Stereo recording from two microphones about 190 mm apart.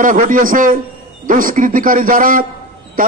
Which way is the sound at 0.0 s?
45° right (ahead or behind).